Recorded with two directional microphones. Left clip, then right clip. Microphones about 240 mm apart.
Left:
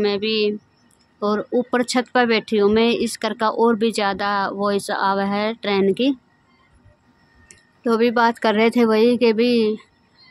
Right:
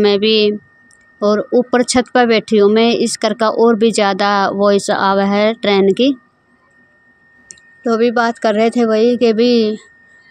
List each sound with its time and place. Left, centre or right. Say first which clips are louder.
0.0 s speech: right 8 dB; right
7.4 s speech: right 4 dB; centre